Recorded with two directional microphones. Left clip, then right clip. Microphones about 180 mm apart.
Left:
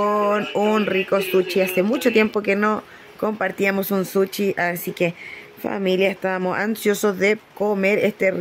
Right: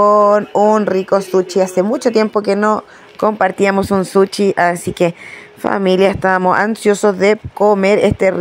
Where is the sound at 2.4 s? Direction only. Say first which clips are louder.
Right 6 dB; 10° right (ahead or behind).